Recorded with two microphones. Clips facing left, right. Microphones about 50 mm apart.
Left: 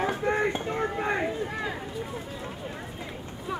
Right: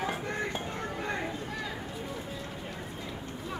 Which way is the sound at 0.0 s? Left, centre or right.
Left.